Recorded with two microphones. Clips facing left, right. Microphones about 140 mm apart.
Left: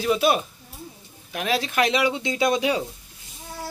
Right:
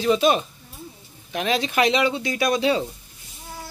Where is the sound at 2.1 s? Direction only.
20° left (ahead or behind).